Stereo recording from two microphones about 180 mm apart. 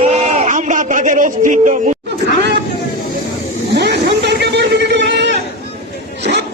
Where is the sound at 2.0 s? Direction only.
70° right (ahead or behind).